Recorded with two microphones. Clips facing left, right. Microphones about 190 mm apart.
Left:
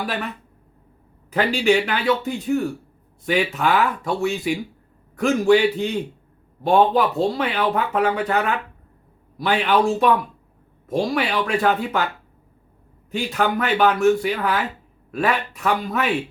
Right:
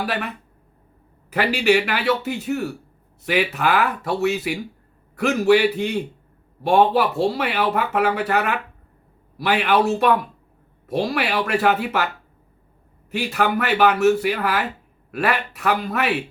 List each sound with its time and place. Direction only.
0.0 s speech: 5° right (ahead or behind)
1.3 s speech: 10° right (ahead or behind)